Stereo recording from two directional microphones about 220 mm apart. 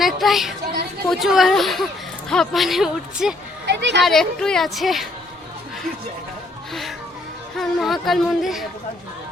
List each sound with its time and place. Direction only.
0.0 s speech: centre (ahead or behind)
3.7 s speech: 50° right (ahead or behind)
4.0 s speech: centre (ahead or behind)
7.6 s speech: centre (ahead or behind)